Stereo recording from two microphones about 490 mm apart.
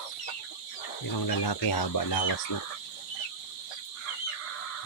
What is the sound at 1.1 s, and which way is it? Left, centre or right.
Speech, left.